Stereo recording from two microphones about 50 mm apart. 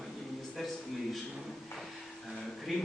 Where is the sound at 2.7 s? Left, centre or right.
Centre.